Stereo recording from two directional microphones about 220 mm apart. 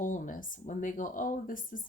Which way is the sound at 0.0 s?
35° left (ahead or behind).